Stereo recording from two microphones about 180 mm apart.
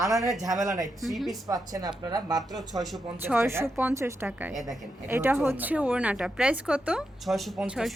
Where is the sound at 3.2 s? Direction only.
10° right (ahead or behind).